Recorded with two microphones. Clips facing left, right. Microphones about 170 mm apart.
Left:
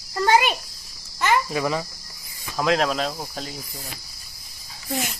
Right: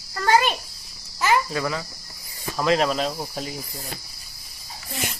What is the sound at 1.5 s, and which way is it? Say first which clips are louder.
Speech: left 2 dB; 15° left (ahead or behind).